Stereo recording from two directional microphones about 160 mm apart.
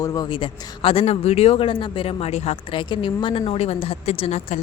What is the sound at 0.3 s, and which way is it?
Speech, 35° left (ahead or behind).